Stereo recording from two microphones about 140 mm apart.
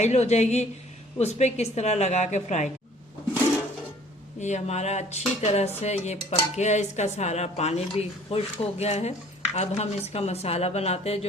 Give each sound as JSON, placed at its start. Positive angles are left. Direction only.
{"t": 0.0, "sound": "a woman's voice", "side_deg": 55}
{"t": 4.4, "sound": "a woman's voice", "side_deg": 55}